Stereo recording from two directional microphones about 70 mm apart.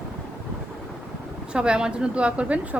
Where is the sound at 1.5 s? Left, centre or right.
Centre.